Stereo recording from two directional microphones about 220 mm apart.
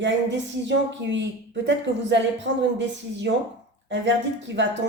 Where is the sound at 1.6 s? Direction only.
55° right (ahead or behind).